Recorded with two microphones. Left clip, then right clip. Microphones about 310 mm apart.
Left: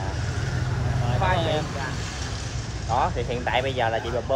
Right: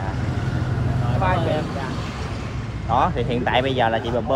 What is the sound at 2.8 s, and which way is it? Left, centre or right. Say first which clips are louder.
Speech: right 4 dB; right.